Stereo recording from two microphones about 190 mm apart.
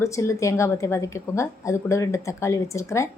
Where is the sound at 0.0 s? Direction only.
15° left (ahead or behind).